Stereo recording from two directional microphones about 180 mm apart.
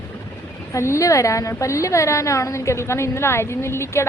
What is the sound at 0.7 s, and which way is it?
A woman's voice, 15° left (ahead or behind).